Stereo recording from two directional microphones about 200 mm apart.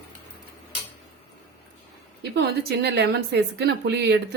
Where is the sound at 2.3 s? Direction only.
55° right (ahead or behind).